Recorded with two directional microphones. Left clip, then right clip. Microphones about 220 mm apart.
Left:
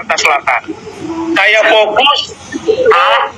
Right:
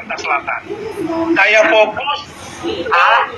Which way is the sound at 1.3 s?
60° left (ahead or behind).